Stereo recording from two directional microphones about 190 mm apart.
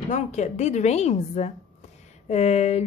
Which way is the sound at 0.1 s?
40° left (ahead or behind).